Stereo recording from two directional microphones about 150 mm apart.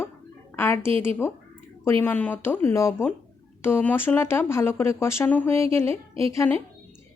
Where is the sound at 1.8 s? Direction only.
15° left (ahead or behind).